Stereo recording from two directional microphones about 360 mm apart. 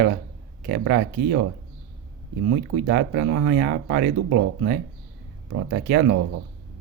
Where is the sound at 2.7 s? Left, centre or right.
Right.